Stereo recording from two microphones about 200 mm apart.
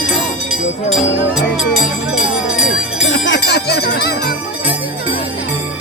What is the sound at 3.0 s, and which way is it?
Jingle bell, 65° left (ahead or behind).